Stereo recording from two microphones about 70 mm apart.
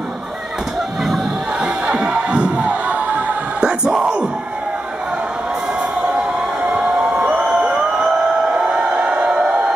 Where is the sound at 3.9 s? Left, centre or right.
Centre.